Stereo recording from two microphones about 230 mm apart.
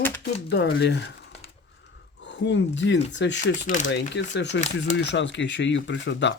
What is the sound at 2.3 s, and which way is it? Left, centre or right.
Speech, left.